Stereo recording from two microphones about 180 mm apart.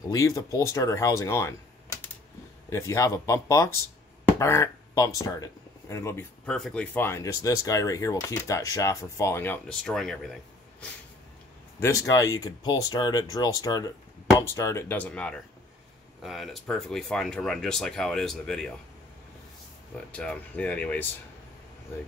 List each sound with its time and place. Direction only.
0.1 s speech: 20° left (ahead or behind)
2.7 s speech: 15° left (ahead or behind)
11.8 s speech: 20° left (ahead or behind); by 18.7 s 5° left (ahead or behind)
20.1 s speech: 5° left (ahead or behind)